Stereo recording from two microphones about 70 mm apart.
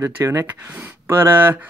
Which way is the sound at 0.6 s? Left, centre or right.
Centre.